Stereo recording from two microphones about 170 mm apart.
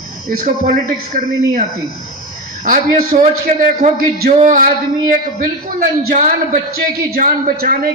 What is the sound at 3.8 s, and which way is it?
A man's voice, 55° right (ahead or behind).